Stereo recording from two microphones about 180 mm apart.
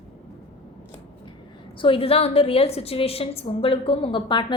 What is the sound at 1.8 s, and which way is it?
A woman's voice, 30° left (ahead or behind).